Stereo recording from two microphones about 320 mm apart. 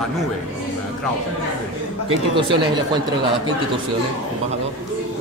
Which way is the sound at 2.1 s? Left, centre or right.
Centre.